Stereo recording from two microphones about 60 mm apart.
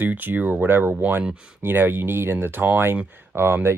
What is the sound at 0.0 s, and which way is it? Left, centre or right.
Speech, right.